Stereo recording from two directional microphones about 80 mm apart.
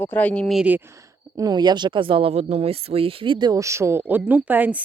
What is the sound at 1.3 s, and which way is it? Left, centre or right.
Speech, right.